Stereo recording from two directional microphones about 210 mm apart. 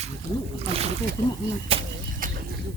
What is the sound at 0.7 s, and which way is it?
Speech, 30° right (ahead or behind).